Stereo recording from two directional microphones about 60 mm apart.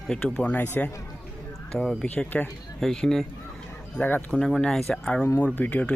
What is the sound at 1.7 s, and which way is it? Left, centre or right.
Speech, centre.